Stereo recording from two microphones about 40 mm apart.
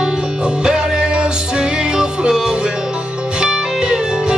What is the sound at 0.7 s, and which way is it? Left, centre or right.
Music, right.